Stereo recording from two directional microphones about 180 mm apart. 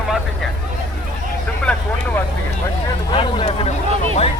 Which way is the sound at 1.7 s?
5° left (ahead or behind).